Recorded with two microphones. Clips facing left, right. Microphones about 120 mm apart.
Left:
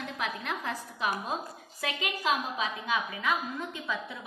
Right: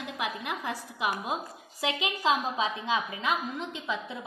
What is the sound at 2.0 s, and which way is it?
A woman's voice, 25° right (ahead or behind).